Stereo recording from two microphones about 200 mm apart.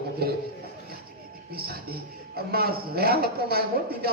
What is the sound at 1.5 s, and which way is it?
Speech, 50° right (ahead or behind).